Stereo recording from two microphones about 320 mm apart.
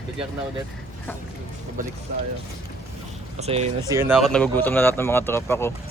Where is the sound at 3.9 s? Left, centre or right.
Centre.